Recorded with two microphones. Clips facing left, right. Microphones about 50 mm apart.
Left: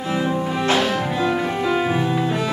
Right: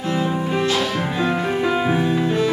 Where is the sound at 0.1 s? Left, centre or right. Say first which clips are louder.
Even; centre.